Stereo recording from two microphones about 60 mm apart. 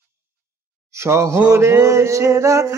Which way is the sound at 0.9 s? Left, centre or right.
Right.